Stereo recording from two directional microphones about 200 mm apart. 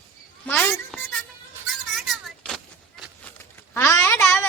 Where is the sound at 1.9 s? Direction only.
Centre (ahead or behind).